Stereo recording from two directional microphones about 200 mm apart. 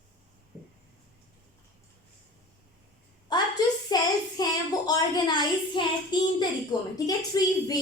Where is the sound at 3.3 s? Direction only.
20° left (ahead or behind).